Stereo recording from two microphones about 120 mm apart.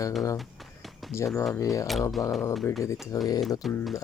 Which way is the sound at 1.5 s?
25° left (ahead or behind).